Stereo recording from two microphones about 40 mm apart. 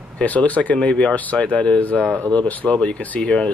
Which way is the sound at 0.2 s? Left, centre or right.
Left.